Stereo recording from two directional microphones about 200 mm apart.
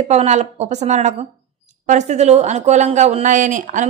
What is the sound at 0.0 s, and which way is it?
A woman's voice, 35° right (ahead or behind).